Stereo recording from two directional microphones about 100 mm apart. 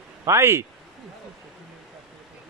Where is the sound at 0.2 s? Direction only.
25° right (ahead or behind).